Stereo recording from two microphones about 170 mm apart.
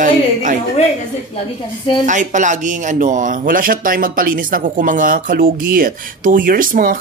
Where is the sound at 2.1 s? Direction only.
45° right (ahead or behind).